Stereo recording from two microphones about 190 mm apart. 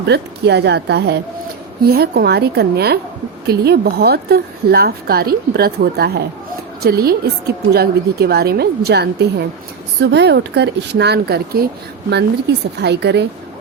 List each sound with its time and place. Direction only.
0.0 s a woman's voice: 60° right (ahead or behind)